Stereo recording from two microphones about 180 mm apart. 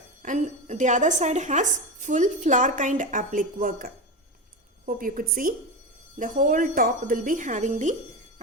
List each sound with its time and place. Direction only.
0.2 s speech: 45° right (ahead or behind)